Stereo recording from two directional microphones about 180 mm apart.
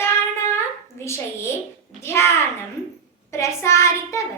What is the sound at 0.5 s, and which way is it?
A child's voice, 15° left (ahead or behind).